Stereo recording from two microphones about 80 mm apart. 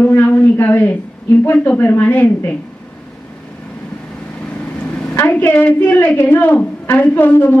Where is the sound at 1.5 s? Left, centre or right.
Left.